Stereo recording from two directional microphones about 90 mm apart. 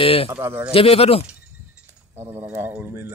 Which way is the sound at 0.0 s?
90° left.